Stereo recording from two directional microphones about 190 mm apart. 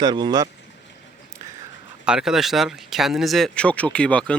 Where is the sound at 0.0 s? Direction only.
20° right (ahead or behind).